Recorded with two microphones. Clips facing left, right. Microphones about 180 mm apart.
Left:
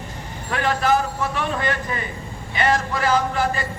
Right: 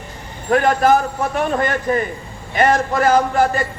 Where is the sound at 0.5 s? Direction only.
45° right (ahead or behind).